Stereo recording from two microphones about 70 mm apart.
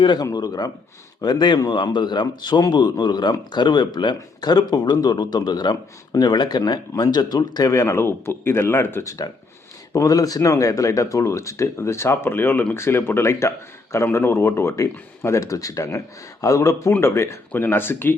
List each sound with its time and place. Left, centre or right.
0.3 s speech: left
1.2 s speech: left
7.7 s speech: left
9.9 s speech: left
17.5 s speech: left